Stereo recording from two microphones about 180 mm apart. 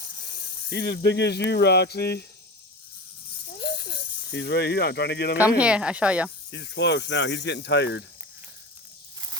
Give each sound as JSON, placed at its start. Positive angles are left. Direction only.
{"t": 0.7, "sound": "speech", "side_deg": 70}
{"t": 3.6, "sound": "a sound", "side_deg": 70}
{"t": 5.4, "sound": "speech", "side_deg": -5}
{"t": 6.5, "sound": "speech", "side_deg": 75}